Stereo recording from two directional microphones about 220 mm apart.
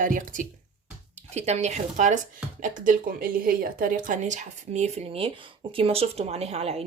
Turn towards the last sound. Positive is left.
turn(degrees=-25)  # may be behind; listen again after turning